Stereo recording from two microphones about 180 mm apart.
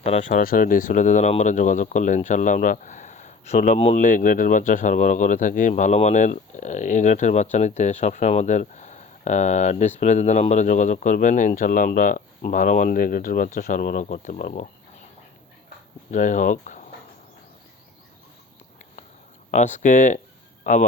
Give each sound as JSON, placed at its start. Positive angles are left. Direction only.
{"t": 0.0, "sound": "speech", "side_deg": 40}
{"t": 16.1, "sound": "speech", "side_deg": 45}
{"t": 19.5, "sound": "speech", "side_deg": 40}